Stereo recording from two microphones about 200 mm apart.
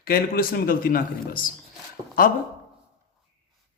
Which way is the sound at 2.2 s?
45° left (ahead or behind).